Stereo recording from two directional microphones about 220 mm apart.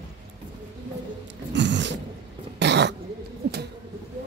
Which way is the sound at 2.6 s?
50° right (ahead or behind).